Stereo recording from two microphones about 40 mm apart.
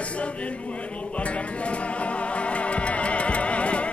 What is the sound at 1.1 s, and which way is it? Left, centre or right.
Music, left.